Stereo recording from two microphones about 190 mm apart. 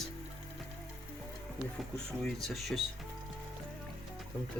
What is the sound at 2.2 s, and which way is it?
Speech, centre (ahead or behind).